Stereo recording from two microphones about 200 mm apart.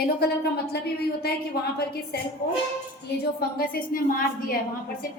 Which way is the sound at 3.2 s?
50° left (ahead or behind).